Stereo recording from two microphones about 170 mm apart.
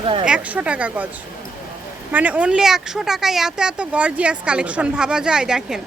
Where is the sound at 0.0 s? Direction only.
30° right (ahead or behind).